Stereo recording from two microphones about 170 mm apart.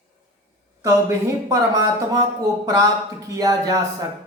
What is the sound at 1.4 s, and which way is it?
Speech, 20° right (ahead or behind).